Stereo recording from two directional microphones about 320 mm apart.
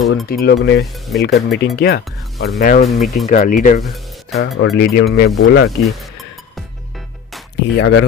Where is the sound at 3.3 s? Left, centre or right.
Left.